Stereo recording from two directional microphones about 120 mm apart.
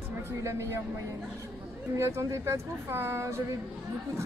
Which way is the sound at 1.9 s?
25° right (ahead or behind).